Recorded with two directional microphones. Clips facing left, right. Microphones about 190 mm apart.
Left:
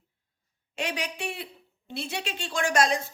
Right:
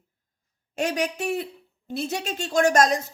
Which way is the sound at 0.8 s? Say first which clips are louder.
Right 7 dB; 45° right (ahead or behind).